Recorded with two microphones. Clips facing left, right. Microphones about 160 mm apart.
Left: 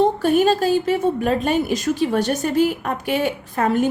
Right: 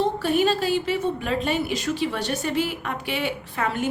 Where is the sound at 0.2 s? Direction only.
45° left (ahead or behind).